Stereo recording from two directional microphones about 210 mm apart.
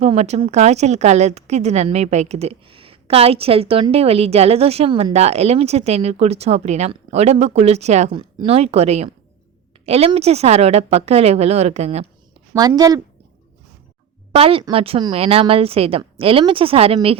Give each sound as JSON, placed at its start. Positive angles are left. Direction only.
{"t": 0.0, "sound": "speech", "side_deg": -30}
{"t": 12.5, "sound": "a woman's voice", "side_deg": -20}
{"t": 14.3, "sound": "speech", "side_deg": -25}